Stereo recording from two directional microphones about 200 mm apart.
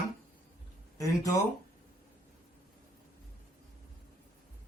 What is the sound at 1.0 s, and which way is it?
Speech, 15° left (ahead or behind).